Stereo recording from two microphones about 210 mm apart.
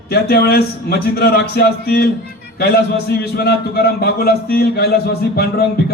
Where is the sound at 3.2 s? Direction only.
50° left (ahead or behind).